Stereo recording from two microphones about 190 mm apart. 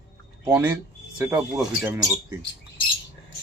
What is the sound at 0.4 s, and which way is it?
Speech, 15° right (ahead or behind).